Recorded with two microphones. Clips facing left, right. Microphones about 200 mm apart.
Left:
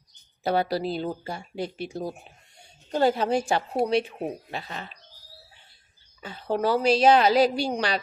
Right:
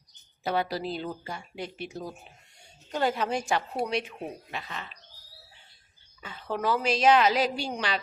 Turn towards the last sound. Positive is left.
turn(degrees=40)  # may be behind; listen again after turning